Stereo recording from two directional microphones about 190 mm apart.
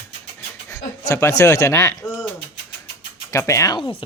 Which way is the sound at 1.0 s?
15° left (ahead or behind).